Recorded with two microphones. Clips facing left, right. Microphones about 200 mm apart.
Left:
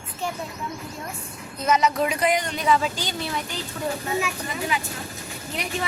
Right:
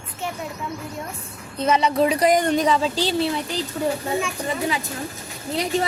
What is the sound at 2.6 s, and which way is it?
Speech, 35° right (ahead or behind).